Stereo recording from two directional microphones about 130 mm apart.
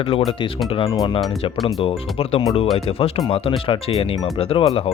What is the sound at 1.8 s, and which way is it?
Speech, 50° left (ahead or behind).